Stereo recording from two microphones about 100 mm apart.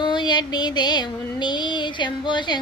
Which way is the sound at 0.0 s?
45° left (ahead or behind).